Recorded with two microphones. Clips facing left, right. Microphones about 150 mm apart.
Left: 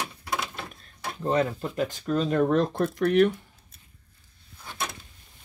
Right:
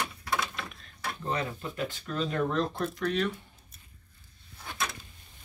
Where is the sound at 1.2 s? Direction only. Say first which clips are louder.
Left 9 dB; 45° left (ahead or behind); by 3.3 s 60° left (ahead or behind).